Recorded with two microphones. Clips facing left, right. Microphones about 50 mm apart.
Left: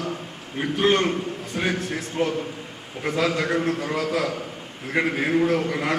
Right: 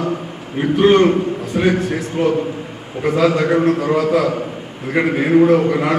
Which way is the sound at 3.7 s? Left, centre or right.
Right.